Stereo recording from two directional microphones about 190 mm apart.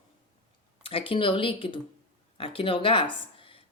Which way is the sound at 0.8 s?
30° left (ahead or behind).